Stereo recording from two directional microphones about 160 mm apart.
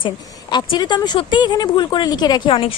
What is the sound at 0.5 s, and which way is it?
Speech, 30° left (ahead or behind).